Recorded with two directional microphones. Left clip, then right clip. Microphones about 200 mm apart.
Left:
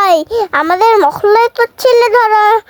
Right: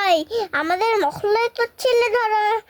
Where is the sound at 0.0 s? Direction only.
10° left (ahead or behind).